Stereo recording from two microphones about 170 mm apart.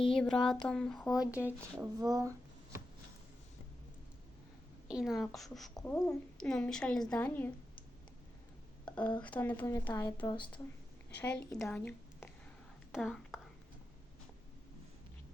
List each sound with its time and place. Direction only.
0.1 s speech: 5° left (ahead or behind); by 2.3 s 20° right (ahead or behind)
4.9 s speech: 5° right (ahead or behind)
5.7 s speech: 15° left (ahead or behind)
6.3 s speech: 5° left (ahead or behind)
9.0 s speech: 10° left (ahead or behind)
10.3 s speech: 30° left (ahead or behind)
11.2 s a woman's voice: 5° left (ahead or behind)
12.9 s whispering: centre (ahead or behind)